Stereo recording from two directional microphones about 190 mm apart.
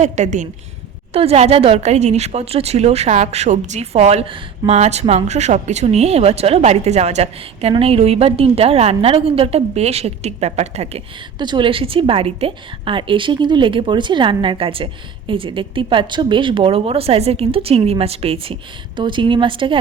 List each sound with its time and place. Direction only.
0.0 s speech: 40° right (ahead or behind)
11.3 s a woman's voice: 25° right (ahead or behind)